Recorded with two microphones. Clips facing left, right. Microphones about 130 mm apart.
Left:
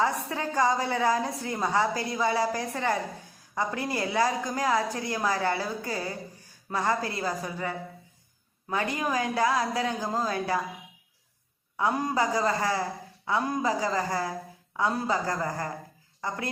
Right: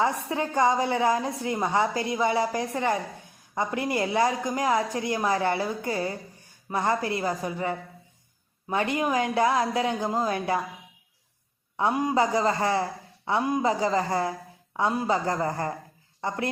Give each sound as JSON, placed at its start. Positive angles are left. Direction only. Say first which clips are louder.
{"t": 0.0, "sound": "a woman's voice", "louder": "right 2 dB", "side_deg": -20}
{"t": 8.7, "sound": "a woman's voice", "louder": "right 3 dB", "side_deg": -20}
{"t": 11.8, "sound": "a woman's voice", "louder": "right 3 dB", "side_deg": -25}